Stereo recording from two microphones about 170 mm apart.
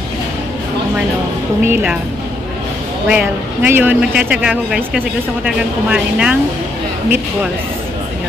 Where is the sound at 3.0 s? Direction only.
10° right (ahead or behind).